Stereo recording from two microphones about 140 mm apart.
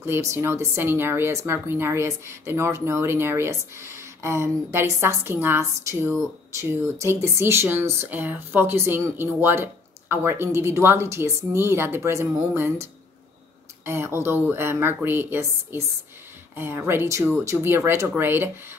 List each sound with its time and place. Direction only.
0.0 s speech: 20° right (ahead or behind)